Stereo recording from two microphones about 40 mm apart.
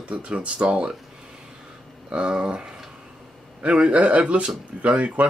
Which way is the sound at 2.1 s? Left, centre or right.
Right.